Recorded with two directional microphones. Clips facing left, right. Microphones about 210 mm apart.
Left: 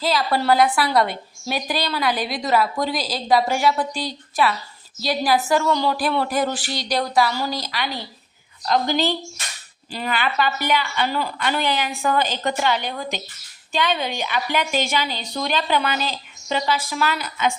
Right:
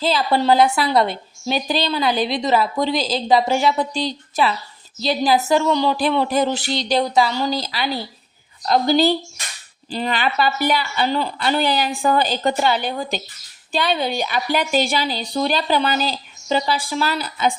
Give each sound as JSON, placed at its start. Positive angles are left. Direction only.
{"t": 0.0, "sound": "a woman's voice", "side_deg": -25}